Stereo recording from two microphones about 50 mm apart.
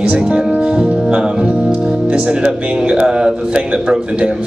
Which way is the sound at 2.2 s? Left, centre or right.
Centre.